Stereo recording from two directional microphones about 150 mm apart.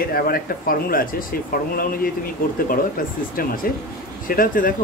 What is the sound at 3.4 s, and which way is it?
Speech, 75° left (ahead or behind).